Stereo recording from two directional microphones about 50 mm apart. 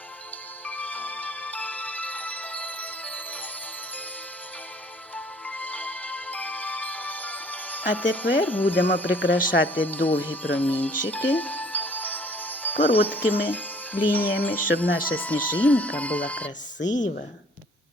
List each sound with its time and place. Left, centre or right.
0.6 s music: left
5.1 s music: left
13.3 s speech: left